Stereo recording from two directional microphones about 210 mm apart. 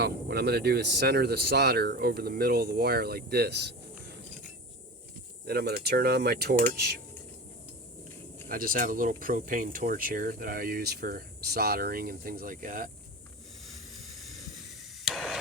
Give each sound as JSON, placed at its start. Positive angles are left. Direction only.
{"t": 0.0, "sound": "speech", "side_deg": -50}
{"t": 5.5, "sound": "speech", "side_deg": -50}
{"t": 8.4, "sound": "speech", "side_deg": -40}
{"t": 14.0, "sound": "a sound", "side_deg": 0}